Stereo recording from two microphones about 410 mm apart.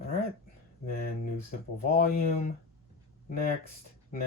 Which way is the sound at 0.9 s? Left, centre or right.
Left.